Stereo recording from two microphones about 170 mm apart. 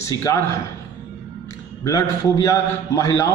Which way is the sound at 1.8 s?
20° left (ahead or behind).